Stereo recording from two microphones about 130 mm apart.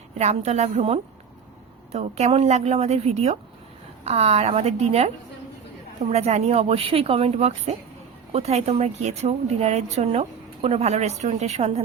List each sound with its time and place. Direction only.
0.2 s speech: 55° right (ahead or behind)